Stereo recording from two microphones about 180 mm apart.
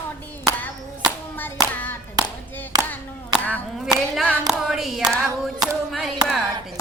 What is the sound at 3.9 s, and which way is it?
Hands, 5° right (ahead or behind).